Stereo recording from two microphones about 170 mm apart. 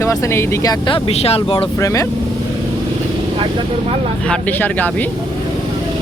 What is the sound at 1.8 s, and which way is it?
Speech, 20° left (ahead or behind).